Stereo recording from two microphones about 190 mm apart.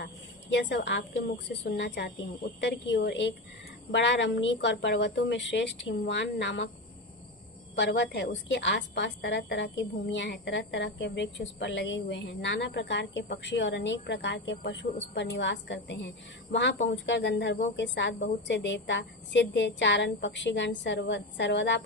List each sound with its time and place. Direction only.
0.5 s a woman's voice: 65° left (ahead or behind)
7.8 s a woman's voice: 65° left (ahead or behind)